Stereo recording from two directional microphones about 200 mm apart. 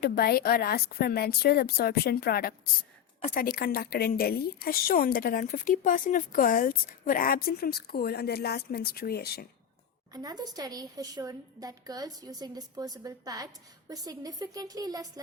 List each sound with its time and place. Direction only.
0.0 s a woman's voice: 50° left (ahead or behind)
3.2 s a woman's voice: 40° left (ahead or behind)
10.1 s a woman's voice: 20° right (ahead or behind)